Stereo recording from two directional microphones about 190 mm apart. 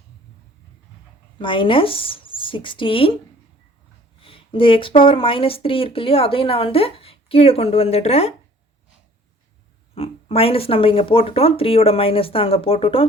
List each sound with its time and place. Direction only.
1.4 s speech: 25° left (ahead or behind)
4.2 s speech: 30° left (ahead or behind)
9.9 s speech: 30° left (ahead or behind)